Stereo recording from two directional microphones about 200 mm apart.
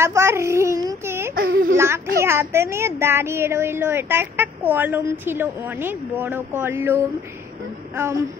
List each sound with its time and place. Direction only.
0.0 s a sound: 15° right (ahead or behind)
1.3 s baby cry: 45° right (ahead or behind)
2.1 s speech: 10° right (ahead or behind)